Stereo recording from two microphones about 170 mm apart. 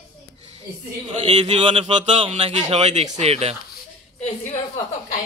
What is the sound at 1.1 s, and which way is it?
A man's voice, 30° right (ahead or behind).